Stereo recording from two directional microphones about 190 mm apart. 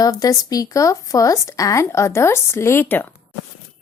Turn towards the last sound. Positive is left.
turn(degrees=10)  # may be behind; listen again after turning